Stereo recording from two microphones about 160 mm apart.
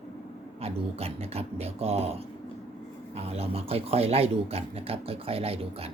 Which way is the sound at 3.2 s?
40° right (ahead or behind).